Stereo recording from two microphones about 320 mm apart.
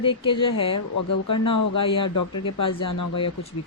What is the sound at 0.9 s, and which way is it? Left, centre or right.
Speech, left.